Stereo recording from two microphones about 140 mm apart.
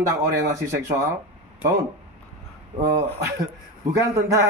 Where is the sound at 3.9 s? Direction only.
20° right (ahead or behind).